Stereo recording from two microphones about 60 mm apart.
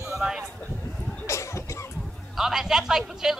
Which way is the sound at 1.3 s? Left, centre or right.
Left.